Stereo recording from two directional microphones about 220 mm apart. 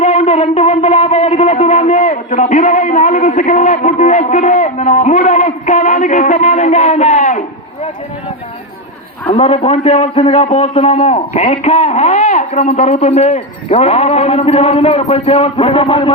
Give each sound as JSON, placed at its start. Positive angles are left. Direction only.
{"t": 0.0, "sound": "speech", "side_deg": 35}
{"t": 9.3, "sound": "a man's voice", "side_deg": 30}